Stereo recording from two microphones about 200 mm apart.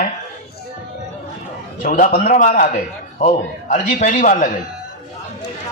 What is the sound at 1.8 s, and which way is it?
A man's voice, 40° left (ahead or behind).